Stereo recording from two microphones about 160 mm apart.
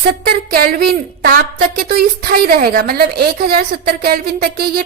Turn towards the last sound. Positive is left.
turn(degrees=-70)  # may be behind; listen again after turning